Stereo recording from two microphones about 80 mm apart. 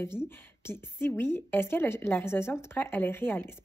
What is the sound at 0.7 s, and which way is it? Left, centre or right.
A woman's voice, left.